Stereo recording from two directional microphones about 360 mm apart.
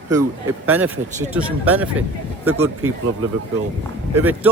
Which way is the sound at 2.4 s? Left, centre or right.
Right.